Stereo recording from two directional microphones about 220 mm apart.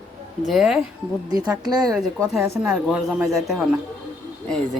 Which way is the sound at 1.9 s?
Centre (ahead or behind).